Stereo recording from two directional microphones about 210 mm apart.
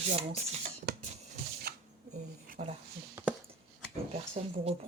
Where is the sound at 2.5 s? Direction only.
30° right (ahead or behind).